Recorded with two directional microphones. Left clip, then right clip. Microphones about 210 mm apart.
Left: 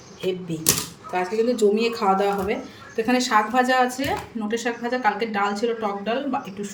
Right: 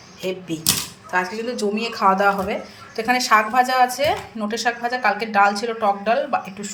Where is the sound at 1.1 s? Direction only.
5° left (ahead or behind).